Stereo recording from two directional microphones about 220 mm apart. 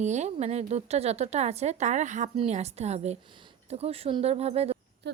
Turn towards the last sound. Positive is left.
turn(degrees=-50)  # may be behind; listen again after turning